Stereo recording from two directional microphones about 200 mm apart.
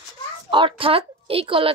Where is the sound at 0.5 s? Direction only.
25° right (ahead or behind).